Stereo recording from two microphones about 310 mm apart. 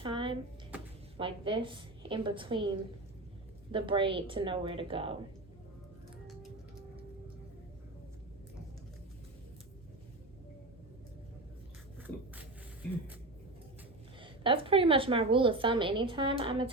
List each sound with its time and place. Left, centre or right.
0.0 s a sound: centre
1.1 s a woman's voice: centre
3.7 s a woman's voice: centre
14.2 s a woman's voice: centre